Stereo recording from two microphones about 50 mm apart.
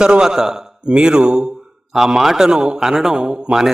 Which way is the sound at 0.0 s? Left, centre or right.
Centre.